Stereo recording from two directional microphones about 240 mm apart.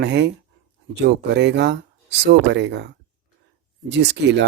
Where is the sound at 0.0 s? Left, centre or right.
Right.